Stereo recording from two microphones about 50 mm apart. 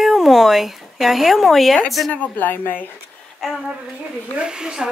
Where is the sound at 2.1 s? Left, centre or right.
Left.